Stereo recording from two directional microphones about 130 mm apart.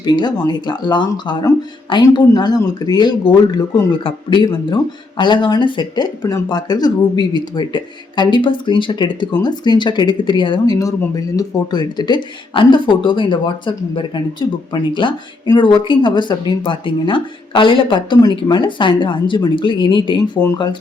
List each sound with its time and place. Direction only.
0.0 s speech: 35° left (ahead or behind)